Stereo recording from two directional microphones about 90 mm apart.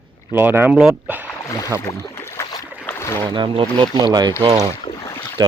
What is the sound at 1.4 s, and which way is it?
Speech, 40° left (ahead or behind).